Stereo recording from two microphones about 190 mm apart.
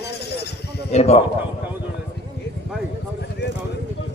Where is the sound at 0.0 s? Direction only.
60° left (ahead or behind).